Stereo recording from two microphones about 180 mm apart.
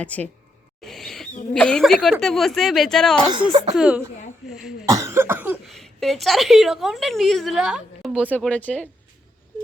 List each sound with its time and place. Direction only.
0.0 s speech: 10° left (ahead or behind)
0.8 s rodents: centre (ahead or behind)
1.5 s a woman's voice: 5° left (ahead or behind)
3.3 s speech: 30° right (ahead or behind)
3.8 s a woman's voice: 5° right (ahead or behind)
4.9 s cough: 20° right (ahead or behind)
5.6 s a woman's voice: centre (ahead or behind)
8.3 s speech: 5° left (ahead or behind)